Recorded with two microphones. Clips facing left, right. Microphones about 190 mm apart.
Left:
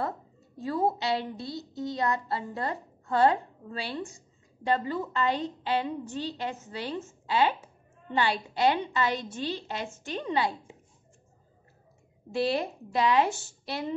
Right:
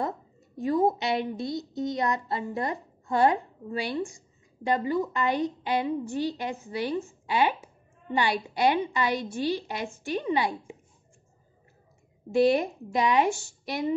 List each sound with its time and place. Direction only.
0.6 s a woman's voice: 15° right (ahead or behind)
12.3 s a woman's voice: 15° right (ahead or behind)